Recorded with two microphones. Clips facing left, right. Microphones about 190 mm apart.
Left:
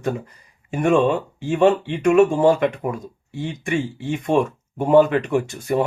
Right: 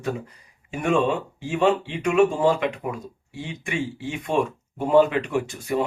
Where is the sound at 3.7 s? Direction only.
50° left (ahead or behind).